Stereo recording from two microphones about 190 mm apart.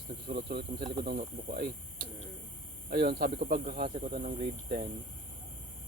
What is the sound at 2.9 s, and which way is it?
Speech, 55° right (ahead or behind).